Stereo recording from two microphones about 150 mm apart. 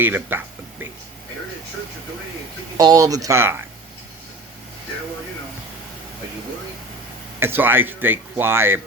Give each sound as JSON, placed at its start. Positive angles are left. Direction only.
{"t": 0.0, "sound": "speech", "side_deg": -15}
{"t": 2.7, "sound": "speech", "side_deg": -25}
{"t": 7.3, "sound": "speech", "side_deg": -15}